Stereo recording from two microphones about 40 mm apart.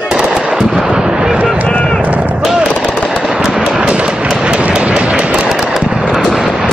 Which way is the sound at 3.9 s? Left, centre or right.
Right.